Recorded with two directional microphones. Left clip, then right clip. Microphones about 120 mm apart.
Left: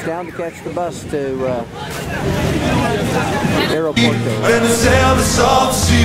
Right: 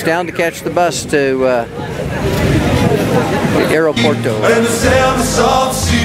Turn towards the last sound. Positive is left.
turn(degrees=0)  # may be behind; listen again after turning